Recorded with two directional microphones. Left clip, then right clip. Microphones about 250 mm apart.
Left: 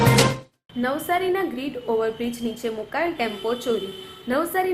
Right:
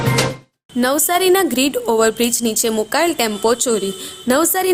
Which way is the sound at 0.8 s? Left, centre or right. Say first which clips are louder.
Right 7 dB; right.